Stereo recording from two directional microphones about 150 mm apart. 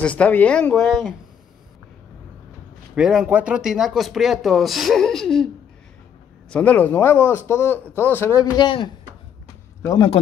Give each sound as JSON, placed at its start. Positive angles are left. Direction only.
{"t": 0.0, "sound": "speech", "side_deg": 10}
{"t": 3.0, "sound": "speech", "side_deg": -5}
{"t": 6.5, "sound": "speech", "side_deg": 10}
{"t": 8.4, "sound": "a man's voice", "side_deg": 30}